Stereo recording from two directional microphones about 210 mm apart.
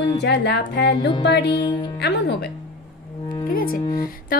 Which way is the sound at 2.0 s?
50° left (ahead or behind).